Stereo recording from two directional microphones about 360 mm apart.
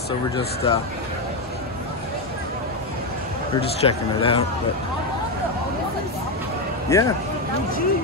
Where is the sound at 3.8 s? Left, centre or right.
Centre.